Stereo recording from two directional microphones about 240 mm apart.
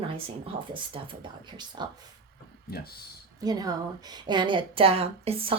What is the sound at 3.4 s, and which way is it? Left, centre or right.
A woman's voice, centre.